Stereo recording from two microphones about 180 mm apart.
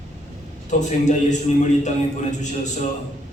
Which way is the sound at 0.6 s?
40° left (ahead or behind).